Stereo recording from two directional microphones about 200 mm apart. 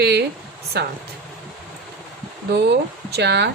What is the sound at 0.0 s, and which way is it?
Speech, 55° right (ahead or behind).